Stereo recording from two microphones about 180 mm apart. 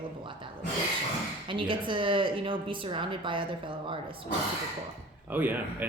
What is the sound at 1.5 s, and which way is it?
Speech, 25° right (ahead or behind).